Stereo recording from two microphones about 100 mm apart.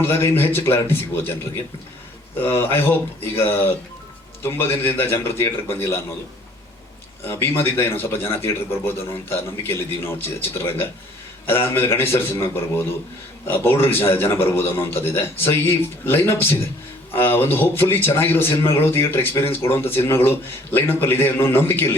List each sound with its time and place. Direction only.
0.0 s a man's voice: 25° left (ahead or behind)
2.4 s a man's voice: 25° left (ahead or behind)
7.3 s a man's voice: 25° left (ahead or behind)